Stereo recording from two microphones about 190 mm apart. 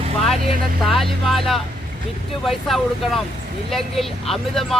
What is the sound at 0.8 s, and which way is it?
Speech, centre (ahead or behind).